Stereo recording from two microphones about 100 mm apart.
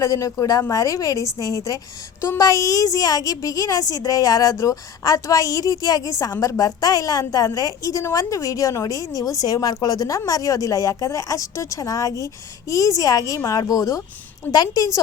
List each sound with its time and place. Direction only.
0.0 s a woman's voice: 35° left (ahead or behind)